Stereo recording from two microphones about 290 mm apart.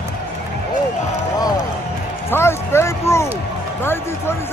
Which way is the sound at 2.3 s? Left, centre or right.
Centre.